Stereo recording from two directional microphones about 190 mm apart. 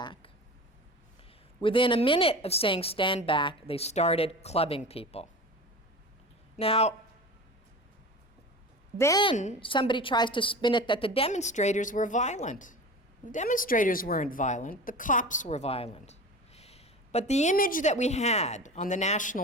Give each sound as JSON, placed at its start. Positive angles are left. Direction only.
{"t": 0.0, "sound": "a sound", "side_deg": 25}
{"t": 1.6, "sound": "a woman's voice", "side_deg": 25}
{"t": 6.6, "sound": "a woman's voice", "side_deg": 30}
{"t": 9.0, "sound": "a woman's voice", "side_deg": 20}
{"t": 9.3, "sound": "a woman's voice", "side_deg": 40}